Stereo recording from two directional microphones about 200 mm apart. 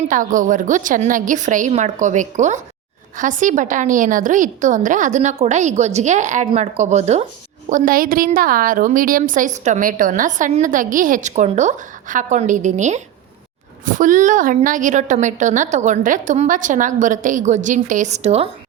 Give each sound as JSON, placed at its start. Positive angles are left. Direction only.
{"t": 0.1, "sound": "a woman's voice", "side_deg": -40}